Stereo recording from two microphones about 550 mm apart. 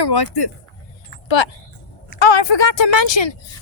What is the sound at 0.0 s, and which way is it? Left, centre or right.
Speech, left.